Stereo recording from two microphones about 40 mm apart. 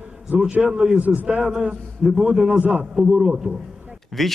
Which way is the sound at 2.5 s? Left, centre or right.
Right.